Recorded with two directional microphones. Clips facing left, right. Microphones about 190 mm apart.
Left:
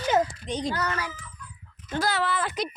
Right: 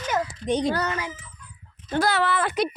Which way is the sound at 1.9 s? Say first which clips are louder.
Right 4 dB; 60° right (ahead or behind).